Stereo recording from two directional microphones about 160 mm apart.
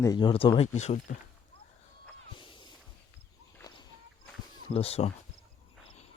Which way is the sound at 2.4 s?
30° left (ahead or behind).